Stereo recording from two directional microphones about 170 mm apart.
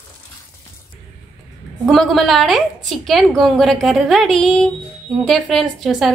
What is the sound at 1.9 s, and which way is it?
A woman's voice, centre (ahead or behind).